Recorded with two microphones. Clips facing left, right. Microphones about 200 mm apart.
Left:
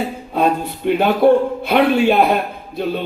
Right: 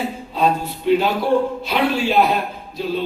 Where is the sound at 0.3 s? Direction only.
55° left (ahead or behind).